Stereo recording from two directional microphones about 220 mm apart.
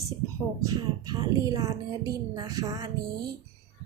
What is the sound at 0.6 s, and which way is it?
A woman's voice, 15° right (ahead or behind).